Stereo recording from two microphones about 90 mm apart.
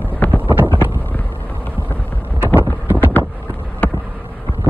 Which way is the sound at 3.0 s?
20° left (ahead or behind).